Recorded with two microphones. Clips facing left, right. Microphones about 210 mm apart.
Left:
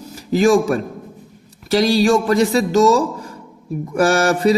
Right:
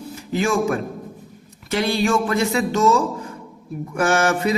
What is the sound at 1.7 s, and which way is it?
A man's voice, 35° left (ahead or behind).